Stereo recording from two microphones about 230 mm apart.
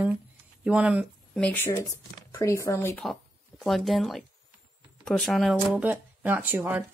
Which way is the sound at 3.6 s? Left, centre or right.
Centre.